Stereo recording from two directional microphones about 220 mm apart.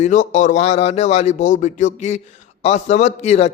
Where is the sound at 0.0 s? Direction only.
35° left (ahead or behind).